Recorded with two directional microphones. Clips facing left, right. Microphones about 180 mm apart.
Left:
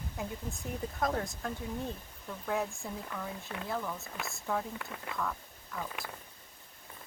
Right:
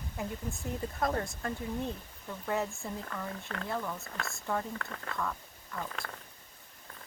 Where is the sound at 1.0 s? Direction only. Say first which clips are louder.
Right 1 dB; centre (ahead or behind).